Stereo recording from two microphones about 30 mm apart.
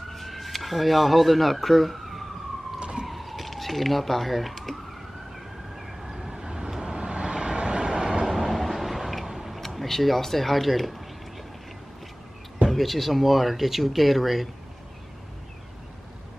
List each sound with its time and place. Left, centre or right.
0.1 s speech: centre
2.8 s a sound: right
3.1 s police car: centre
5.8 s vehicle: centre
6.1 s vehicle: centre
8.3 s vehicle: centre
9.6 s speech: centre
12.6 s speech: centre